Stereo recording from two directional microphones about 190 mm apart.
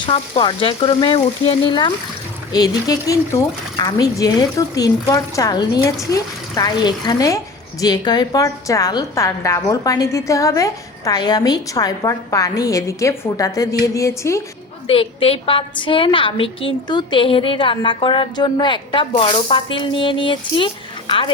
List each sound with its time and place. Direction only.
0.0 s a woman's voice: 25° left (ahead or behind)
14.8 s a woman's voice: 30° left (ahead or behind)